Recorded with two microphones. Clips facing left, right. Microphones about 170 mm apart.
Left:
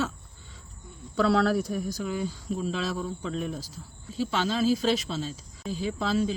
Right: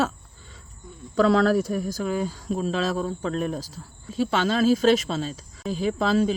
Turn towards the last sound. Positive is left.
turn(degrees=-85)